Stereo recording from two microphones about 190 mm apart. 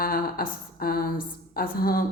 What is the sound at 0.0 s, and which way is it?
A woman's voice, 50° left (ahead or behind).